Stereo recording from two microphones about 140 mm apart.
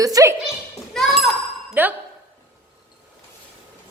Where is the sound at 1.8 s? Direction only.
15° right (ahead or behind).